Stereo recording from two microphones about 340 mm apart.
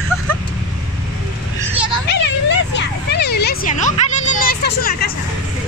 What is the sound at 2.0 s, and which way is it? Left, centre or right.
Cat, left.